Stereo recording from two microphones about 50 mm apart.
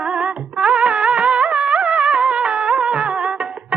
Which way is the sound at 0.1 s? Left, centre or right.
Right.